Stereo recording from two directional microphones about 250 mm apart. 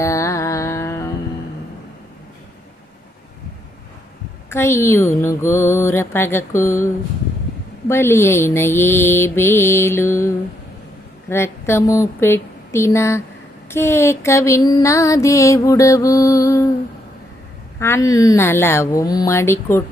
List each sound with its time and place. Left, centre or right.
0.0 s music: centre
4.4 s music: centre
17.7 s music: centre